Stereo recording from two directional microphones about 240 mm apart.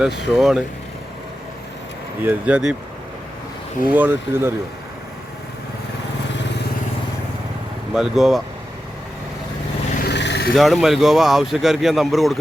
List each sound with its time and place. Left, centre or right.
0.3 s speech: centre
2.2 s speech: centre
3.8 s speech: centre
7.9 s speech: centre
10.0 s vehicle: left
10.5 s speech: centre